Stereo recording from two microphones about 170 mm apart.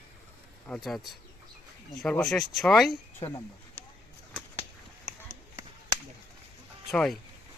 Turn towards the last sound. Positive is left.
turn(degrees=5)  # may be behind; listen again after turning